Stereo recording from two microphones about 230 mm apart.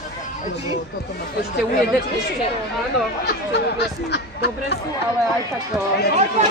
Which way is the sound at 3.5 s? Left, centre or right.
Left.